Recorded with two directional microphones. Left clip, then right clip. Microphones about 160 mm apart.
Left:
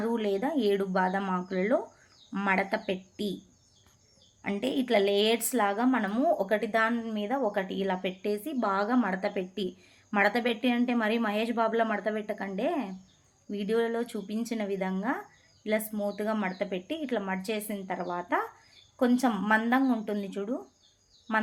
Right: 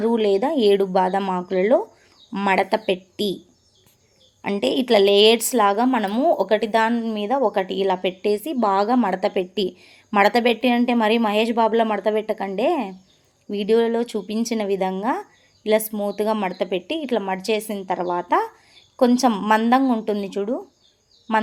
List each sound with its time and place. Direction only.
0.0 s a woman's voice: 30° right (ahead or behind)
4.4 s a woman's voice: 30° right (ahead or behind)